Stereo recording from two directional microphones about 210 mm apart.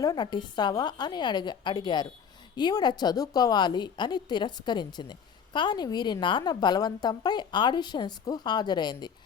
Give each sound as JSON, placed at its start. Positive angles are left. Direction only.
{"t": 0.0, "sound": "a woman's voice", "side_deg": 20}